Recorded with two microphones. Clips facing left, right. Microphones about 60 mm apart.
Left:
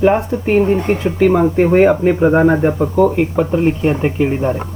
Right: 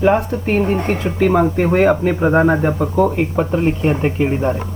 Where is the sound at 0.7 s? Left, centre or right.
Right.